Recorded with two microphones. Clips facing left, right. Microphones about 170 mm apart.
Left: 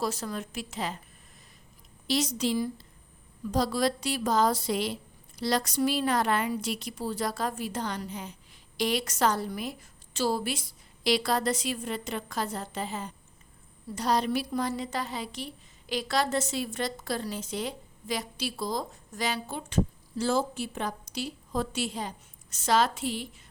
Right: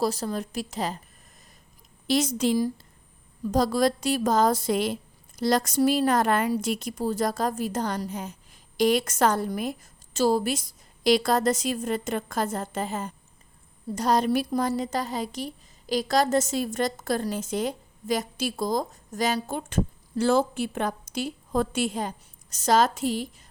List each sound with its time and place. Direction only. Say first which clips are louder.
0.0 s a woman's voice: right 5 dB; 35° right (ahead or behind)
2.0 s a woman's voice: right 4 dB; 50° right (ahead or behind)